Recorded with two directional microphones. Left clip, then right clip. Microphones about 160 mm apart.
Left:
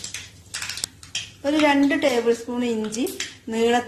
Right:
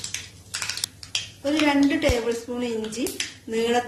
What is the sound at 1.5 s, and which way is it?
A woman's voice, 50° left (ahead or behind).